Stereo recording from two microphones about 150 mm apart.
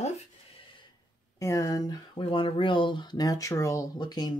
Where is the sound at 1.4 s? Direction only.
20° left (ahead or behind).